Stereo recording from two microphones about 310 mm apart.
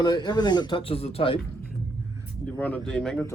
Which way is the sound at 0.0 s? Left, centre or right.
Centre.